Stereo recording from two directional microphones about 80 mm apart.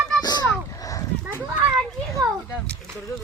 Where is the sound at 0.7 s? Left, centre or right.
Left.